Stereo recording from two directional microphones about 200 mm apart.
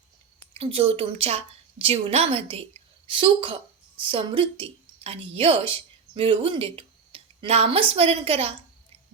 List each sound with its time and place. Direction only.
0.5 s a woman's voice: 30° right (ahead or behind)